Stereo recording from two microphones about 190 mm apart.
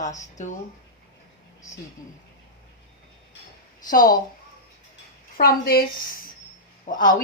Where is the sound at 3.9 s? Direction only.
45° left (ahead or behind).